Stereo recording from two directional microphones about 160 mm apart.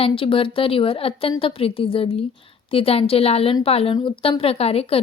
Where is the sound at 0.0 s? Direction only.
35° left (ahead or behind).